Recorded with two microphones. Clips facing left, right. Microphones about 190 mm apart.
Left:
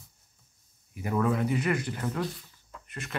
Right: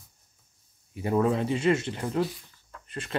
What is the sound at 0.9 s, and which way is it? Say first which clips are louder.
Speech: right 3 dB; 30° right (ahead or behind).